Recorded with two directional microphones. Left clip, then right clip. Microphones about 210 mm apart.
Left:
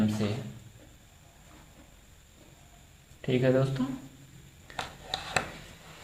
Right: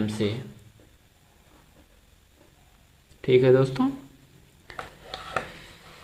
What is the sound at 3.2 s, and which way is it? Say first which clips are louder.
Speech: right 8 dB; 50° right (ahead or behind).